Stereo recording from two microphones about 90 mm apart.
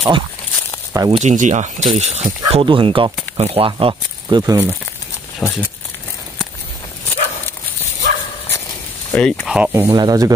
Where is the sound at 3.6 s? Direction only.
85° right.